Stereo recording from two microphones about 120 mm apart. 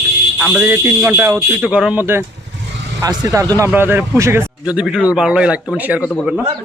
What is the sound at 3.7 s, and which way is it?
Speech, 15° right (ahead or behind).